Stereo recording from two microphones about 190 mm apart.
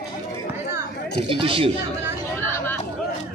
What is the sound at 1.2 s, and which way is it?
Speech, 30° right (ahead or behind).